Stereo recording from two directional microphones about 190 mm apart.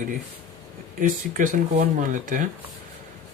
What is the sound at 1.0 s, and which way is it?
Speech, 45° right (ahead or behind).